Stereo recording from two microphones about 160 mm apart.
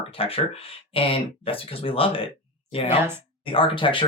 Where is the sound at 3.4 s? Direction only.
35° left (ahead or behind).